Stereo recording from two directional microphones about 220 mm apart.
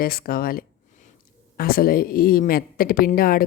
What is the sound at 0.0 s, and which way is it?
A woman's voice, 40° left (ahead or behind).